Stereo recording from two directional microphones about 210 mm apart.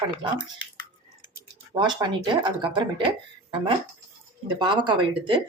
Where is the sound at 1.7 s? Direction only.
20° right (ahead or behind).